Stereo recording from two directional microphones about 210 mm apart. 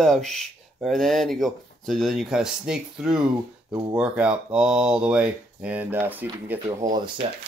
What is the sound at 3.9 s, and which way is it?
Speech, 5° right (ahead or behind).